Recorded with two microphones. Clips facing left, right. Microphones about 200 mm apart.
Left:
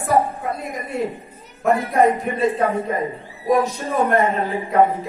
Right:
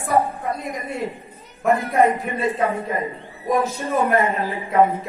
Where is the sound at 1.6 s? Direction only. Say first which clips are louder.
Left 1 dB; centre (ahead or behind).